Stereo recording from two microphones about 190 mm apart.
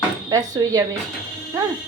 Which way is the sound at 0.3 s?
20° right (ahead or behind).